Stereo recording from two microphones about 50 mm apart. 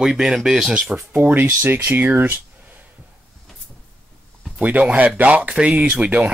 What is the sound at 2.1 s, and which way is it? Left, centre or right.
Speech, right.